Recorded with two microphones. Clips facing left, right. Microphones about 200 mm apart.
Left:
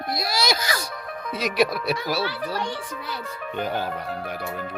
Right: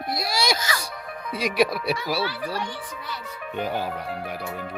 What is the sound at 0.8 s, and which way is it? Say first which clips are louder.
Speech: left 2 dB; 5° right (ahead or behind).